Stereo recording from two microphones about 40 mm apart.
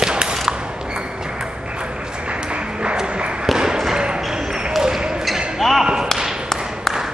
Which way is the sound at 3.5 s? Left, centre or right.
Centre.